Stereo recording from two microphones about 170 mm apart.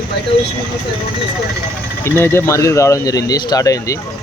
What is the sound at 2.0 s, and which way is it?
Speech, 15° left (ahead or behind).